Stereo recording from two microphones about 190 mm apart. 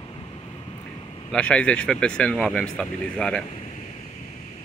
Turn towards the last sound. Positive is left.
turn(degrees=5)  # may be behind; listen again after turning